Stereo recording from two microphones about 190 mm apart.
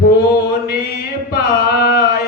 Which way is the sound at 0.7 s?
55° left (ahead or behind).